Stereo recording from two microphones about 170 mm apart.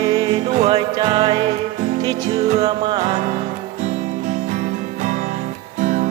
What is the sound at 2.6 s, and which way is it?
Music, 25° right (ahead or behind).